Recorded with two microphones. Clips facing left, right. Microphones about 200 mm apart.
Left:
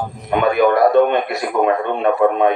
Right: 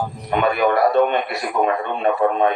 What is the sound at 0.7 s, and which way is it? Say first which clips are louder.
A man's voice: left 3 dB; 50° left (ahead or behind).